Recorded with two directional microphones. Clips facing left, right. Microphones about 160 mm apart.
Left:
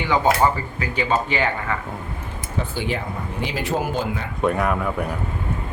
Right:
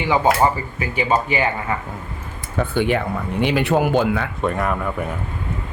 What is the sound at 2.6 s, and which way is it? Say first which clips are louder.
Speech: right 7 dB; 60° right (ahead or behind).